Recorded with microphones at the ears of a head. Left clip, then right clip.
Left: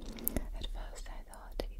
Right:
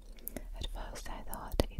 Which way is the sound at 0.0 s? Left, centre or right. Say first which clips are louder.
Left 7 dB; left.